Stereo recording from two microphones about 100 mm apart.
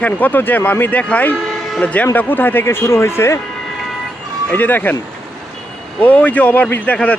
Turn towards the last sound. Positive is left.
turn(degrees=15)  # may be behind; listen again after turning